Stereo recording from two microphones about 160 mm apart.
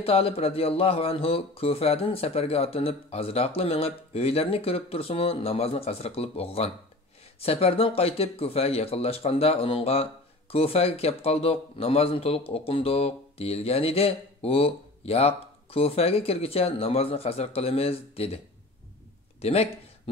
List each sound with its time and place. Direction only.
0.0 s speech: 40° left (ahead or behind)
19.4 s speech: 40° left (ahead or behind)